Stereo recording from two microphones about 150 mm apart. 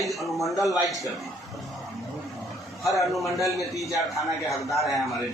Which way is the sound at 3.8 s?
20° left (ahead or behind).